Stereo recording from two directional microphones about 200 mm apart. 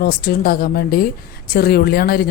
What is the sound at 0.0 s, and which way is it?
Speech, 50° left (ahead or behind).